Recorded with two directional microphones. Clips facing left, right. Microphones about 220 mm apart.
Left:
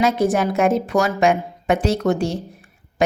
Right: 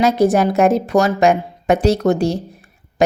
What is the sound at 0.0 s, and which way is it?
A woman's voice, 40° right (ahead or behind).